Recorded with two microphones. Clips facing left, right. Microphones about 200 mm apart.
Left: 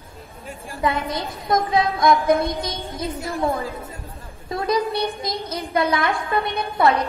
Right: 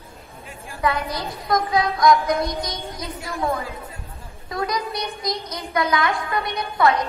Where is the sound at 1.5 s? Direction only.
25° left (ahead or behind).